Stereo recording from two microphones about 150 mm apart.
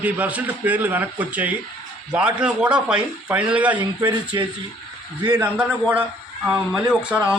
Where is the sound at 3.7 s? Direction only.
30° right (ahead or behind).